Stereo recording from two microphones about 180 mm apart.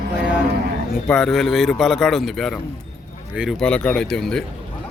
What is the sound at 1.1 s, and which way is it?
Speech, centre (ahead or behind).